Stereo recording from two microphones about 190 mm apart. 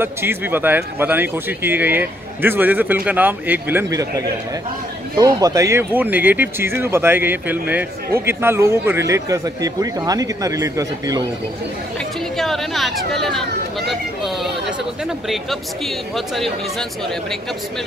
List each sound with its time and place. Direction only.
0.0 s speech: 10° right (ahead or behind)
5.1 s speech: 20° right (ahead or behind)
12.4 s speech: centre (ahead or behind)